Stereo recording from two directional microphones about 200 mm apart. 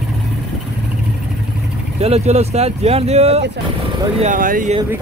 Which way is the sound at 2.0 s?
30° right (ahead or behind).